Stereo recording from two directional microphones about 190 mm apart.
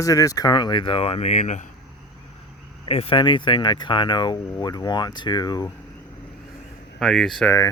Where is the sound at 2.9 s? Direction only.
30° left (ahead or behind).